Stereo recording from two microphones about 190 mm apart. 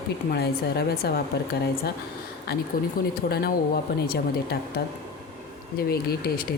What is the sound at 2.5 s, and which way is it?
Speech, 55° left (ahead or behind).